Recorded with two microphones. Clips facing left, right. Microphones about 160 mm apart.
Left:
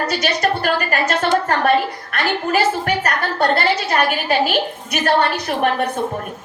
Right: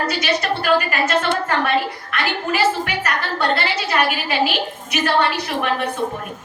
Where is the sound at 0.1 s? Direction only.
45° left (ahead or behind).